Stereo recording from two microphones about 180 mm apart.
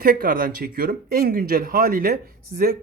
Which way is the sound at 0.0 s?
55° right (ahead or behind).